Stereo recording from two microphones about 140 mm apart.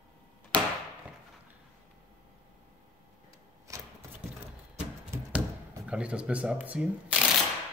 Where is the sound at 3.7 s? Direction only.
20° right (ahead or behind).